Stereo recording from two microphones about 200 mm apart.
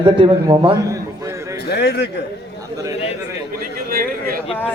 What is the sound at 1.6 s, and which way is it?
Speech, 55° left (ahead or behind).